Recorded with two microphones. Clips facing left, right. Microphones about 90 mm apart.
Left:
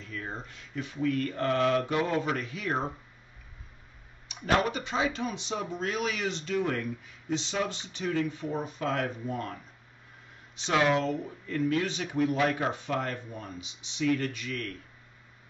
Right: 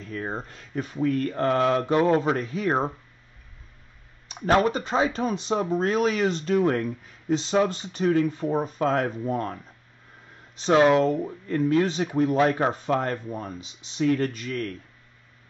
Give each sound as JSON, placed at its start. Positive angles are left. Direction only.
{"t": 0.0, "sound": "speech", "side_deg": -40}
{"t": 4.3, "sound": "speech", "side_deg": -40}